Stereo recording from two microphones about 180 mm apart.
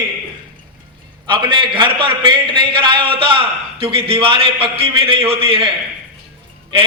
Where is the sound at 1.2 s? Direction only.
25° right (ahead or behind).